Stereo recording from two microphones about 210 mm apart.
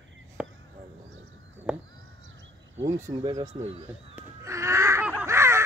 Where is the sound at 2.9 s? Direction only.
15° right (ahead or behind).